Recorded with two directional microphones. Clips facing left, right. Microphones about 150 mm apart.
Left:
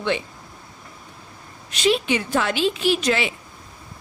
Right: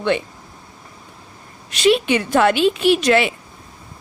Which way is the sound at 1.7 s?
70° right (ahead or behind).